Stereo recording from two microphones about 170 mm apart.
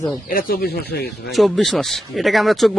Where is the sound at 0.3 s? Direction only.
60° left (ahead or behind); by 1.3 s 75° left (ahead or behind).